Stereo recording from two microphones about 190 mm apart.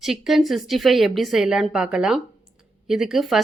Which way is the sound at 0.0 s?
Centre (ahead or behind).